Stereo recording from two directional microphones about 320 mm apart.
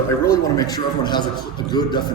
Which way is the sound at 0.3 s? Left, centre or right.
Centre.